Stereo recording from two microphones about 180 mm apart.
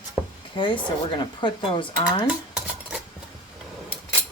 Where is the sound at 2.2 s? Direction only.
5° right (ahead or behind).